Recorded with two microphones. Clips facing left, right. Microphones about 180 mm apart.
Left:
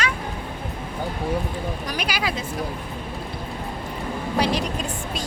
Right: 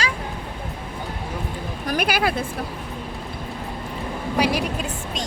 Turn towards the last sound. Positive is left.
turn(degrees=-10)  # may be behind; listen again after turning